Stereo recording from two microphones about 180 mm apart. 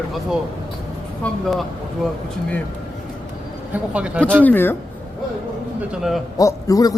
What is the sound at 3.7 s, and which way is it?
Speech, 5° right (ahead or behind).